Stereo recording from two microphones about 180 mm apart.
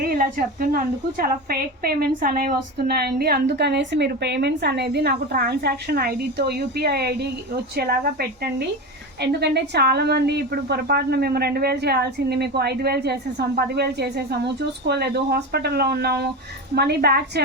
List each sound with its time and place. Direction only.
0.0 s a woman's voice: 55° right (ahead or behind)
9.2 s a woman's voice: 65° right (ahead or behind)